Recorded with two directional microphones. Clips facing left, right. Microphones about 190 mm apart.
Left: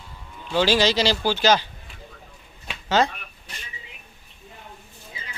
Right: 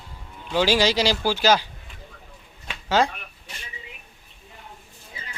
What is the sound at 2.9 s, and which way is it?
Speech, 10° right (ahead or behind).